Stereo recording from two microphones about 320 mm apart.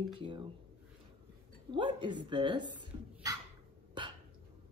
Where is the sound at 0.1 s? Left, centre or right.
Centre.